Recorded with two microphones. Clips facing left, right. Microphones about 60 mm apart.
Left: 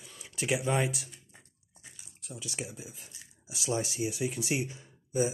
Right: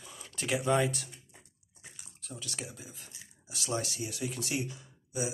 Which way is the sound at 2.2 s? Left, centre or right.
Centre.